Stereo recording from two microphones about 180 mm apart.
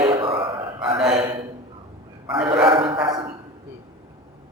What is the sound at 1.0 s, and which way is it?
Speech, 5° right (ahead or behind).